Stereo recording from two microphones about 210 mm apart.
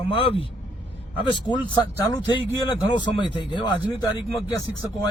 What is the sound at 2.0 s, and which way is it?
Speech, 20° left (ahead or behind).